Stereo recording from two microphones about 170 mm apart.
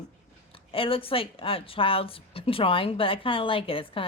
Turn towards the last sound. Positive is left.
turn(degrees=30)  # may be behind; listen again after turning